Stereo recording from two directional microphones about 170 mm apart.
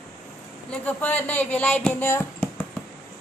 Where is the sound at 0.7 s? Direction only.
10° left (ahead or behind).